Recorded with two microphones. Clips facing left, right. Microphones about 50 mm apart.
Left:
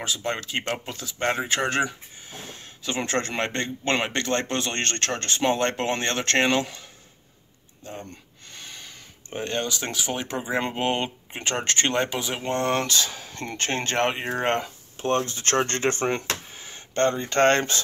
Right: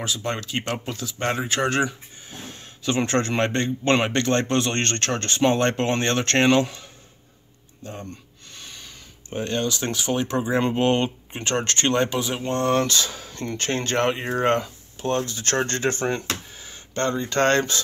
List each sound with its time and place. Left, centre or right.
0.0 s a man's voice: centre
8.5 s speech: left
12.8 s speech: centre
13.6 s speech: left
16.5 s a sound: left
17.3 s speech: centre